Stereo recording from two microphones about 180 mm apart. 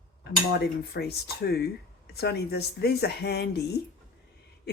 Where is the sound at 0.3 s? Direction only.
65° left (ahead or behind).